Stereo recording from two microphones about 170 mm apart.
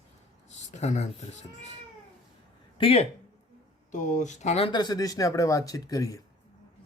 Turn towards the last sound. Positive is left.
turn(degrees=20)  # may be behind; listen again after turning